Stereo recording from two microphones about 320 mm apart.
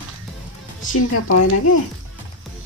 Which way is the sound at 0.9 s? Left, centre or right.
Left.